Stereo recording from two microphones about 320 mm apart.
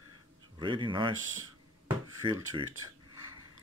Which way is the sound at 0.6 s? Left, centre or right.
Centre.